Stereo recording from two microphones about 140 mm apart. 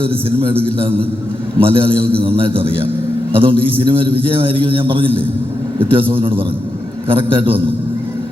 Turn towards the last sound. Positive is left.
turn(degrees=-40)  # may be behind; listen again after turning